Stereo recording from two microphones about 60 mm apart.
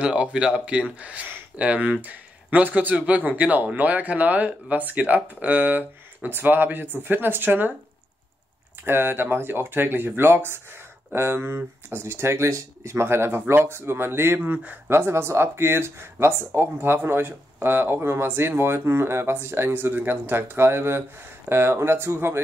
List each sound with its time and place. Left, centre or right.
0.0 s speech: centre
8.8 s speech: right
14.5 s speech: right
14.9 s speech: right